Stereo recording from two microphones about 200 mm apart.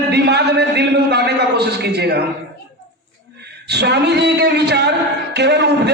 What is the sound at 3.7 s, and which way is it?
A man's voice, 55° right (ahead or behind).